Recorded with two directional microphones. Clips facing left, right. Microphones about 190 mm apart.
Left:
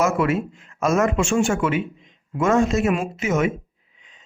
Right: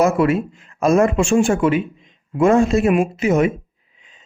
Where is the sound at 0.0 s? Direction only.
30° right (ahead or behind).